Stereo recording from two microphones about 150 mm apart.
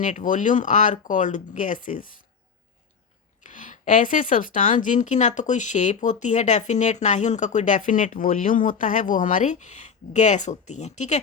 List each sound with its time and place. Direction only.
0.0 s a woman's voice: 60° left (ahead or behind)
3.4 s a woman's voice: 60° left (ahead or behind)